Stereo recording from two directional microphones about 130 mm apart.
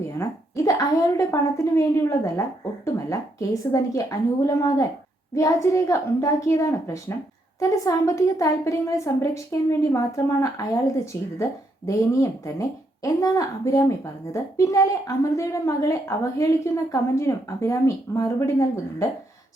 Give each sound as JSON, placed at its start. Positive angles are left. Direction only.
{"t": 0.2, "sound": "a woman's voice", "side_deg": 25}